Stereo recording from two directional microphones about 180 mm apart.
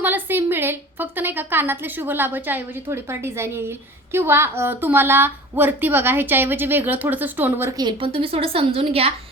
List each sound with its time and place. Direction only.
0.0 s a woman's voice: 10° right (ahead or behind); by 9.1 s 35° right (ahead or behind)